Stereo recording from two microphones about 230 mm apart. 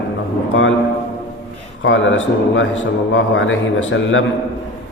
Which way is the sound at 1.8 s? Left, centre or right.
Left.